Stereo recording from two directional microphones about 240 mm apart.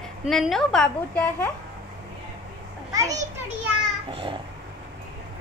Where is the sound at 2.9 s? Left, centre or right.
Centre.